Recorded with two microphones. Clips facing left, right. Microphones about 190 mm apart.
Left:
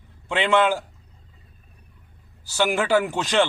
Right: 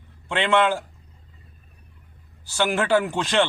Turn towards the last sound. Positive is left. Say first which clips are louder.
# left 1 dB
turn(degrees=0)  # may be behind; listen again after turning